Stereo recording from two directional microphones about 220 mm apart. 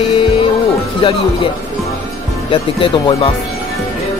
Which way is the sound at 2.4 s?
25° left (ahead or behind).